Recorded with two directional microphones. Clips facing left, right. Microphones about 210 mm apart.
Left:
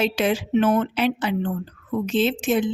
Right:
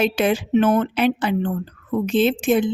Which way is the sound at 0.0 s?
55° right (ahead or behind).